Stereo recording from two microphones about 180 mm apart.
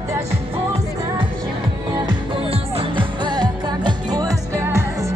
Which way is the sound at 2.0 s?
25° right (ahead or behind).